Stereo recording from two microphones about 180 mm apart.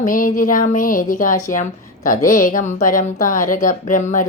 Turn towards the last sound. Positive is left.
turn(degrees=45)  # may be behind; listen again after turning